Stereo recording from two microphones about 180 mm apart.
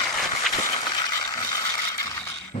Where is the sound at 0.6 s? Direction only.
25° left (ahead or behind).